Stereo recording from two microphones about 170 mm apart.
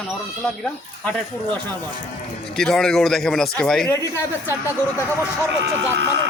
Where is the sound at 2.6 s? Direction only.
5° left (ahead or behind).